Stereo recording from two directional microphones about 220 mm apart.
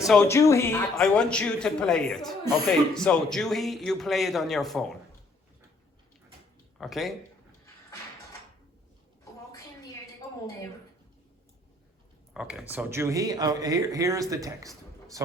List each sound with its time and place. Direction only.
0.3 s a man's voice: 15° left (ahead or behind)
6.7 s speech: centre (ahead or behind)
12.3 s speech: 5° right (ahead or behind)